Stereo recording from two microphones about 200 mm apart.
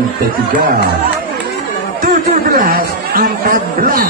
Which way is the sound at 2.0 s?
45° right (ahead or behind).